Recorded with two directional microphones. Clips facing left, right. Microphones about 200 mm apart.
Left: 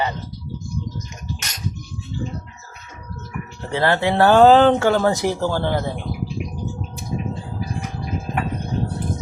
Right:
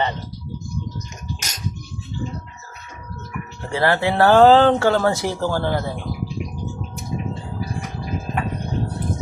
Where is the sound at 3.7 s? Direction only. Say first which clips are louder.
Even; 20° left (ahead or behind).